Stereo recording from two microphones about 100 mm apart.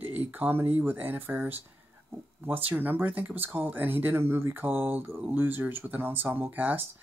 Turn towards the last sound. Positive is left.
turn(degrees=-15)  # may be behind; listen again after turning